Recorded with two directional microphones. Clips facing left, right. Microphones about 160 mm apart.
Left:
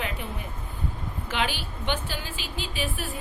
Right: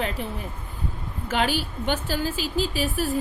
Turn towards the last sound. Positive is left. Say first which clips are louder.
# right 7 dB
turn(degrees=-40)  # may be behind; listen again after turning